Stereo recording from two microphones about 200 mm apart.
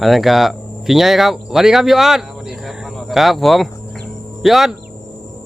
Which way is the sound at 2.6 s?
Centre (ahead or behind).